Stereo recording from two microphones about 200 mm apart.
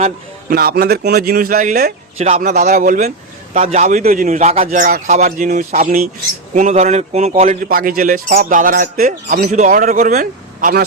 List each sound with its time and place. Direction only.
0.5 s a man's voice: 50° right (ahead or behind)